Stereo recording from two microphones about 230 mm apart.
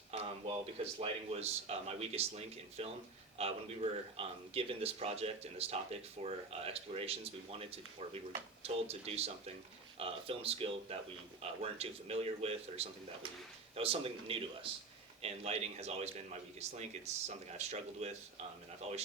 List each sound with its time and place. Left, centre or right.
0.1 s speech: right